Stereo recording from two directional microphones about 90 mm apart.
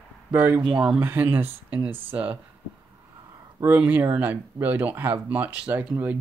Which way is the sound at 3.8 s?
20° right (ahead or behind).